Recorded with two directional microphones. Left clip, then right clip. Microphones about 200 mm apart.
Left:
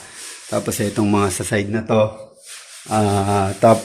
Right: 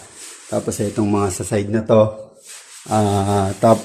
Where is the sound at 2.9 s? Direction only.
10° right (ahead or behind).